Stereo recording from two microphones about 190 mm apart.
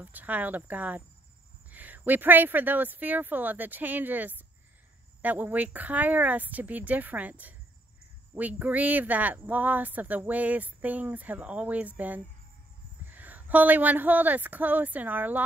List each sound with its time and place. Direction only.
0.0 s speech: 10° right (ahead or behind)